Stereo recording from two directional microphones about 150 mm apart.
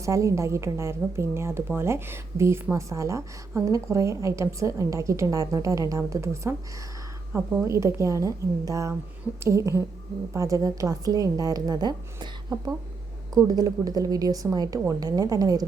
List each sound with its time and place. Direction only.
0.0 s a woman's voice: 20° right (ahead or behind)